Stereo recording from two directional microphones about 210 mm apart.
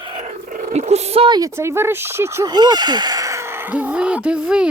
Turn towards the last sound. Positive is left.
turn(degrees=-5)  # may be behind; listen again after turning